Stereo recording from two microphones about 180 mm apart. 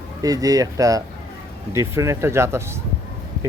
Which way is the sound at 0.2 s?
20° right (ahead or behind).